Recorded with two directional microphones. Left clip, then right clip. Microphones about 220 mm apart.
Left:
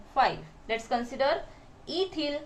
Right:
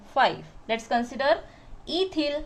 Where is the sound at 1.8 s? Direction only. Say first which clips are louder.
Right 4 dB; 50° right (ahead or behind).